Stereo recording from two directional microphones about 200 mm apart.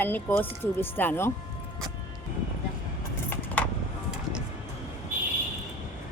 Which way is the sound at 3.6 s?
5° left (ahead or behind).